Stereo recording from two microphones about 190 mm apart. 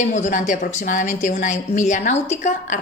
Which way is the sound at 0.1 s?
40° left (ahead or behind).